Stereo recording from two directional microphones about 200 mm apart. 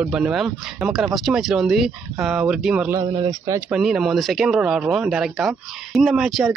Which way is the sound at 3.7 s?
Centre (ahead or behind).